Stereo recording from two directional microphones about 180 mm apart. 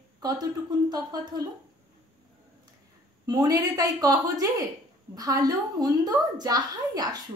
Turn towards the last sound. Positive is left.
turn(degrees=-20)  # may be behind; listen again after turning